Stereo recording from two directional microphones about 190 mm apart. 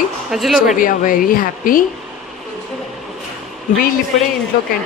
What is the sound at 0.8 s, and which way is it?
Speech, 45° left (ahead or behind).